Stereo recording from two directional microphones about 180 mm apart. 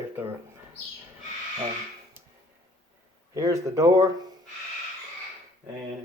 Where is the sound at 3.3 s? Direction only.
15° right (ahead or behind).